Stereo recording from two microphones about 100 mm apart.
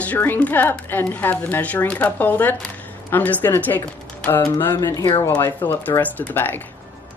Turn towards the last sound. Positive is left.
turn(degrees=20)  # may be behind; listen again after turning